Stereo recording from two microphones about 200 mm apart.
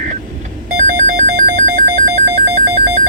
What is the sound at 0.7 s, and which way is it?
Telephone bell ringing, 35° right (ahead or behind).